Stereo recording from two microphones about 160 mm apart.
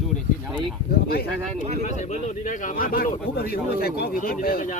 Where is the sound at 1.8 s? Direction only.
45° left (ahead or behind).